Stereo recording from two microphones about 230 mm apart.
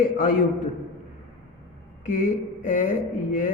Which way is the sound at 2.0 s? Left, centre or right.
Left.